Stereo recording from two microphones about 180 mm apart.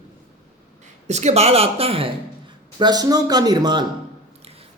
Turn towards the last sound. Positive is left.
turn(degrees=-25)  # may be behind; listen again after turning